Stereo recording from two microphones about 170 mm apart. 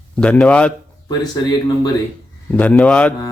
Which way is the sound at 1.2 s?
25° left (ahead or behind).